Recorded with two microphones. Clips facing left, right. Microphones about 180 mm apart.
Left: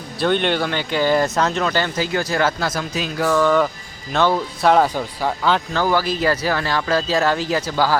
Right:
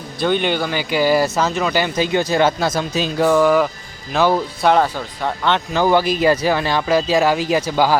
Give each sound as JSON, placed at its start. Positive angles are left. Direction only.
{"t": 0.2, "sound": "speech", "side_deg": 0}
{"t": 2.0, "sound": "speech", "side_deg": -20}
{"t": 5.7, "sound": "speech", "side_deg": -20}